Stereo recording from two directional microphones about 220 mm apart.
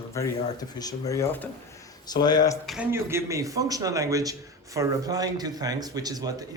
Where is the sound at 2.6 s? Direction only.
5° right (ahead or behind).